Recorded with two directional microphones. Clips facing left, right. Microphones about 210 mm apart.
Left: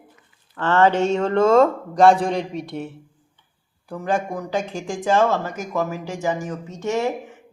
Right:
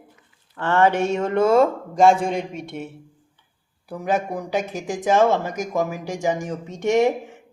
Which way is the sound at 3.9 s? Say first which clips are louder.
Even; 5° right (ahead or behind).